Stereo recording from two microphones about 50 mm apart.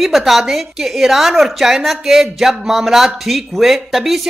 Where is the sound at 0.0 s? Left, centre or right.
Centre.